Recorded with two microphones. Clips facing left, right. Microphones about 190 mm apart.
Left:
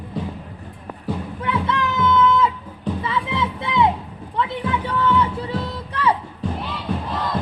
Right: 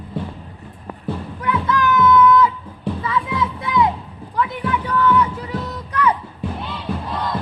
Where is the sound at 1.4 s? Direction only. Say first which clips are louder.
Right 4 dB; 25° left (ahead or behind).